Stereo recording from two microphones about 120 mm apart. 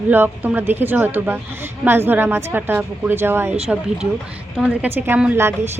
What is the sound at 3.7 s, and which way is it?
A woman's voice, 5° right (ahead or behind).